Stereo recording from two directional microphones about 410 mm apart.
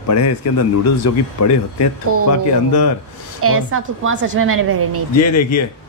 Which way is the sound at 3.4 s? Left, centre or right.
Right.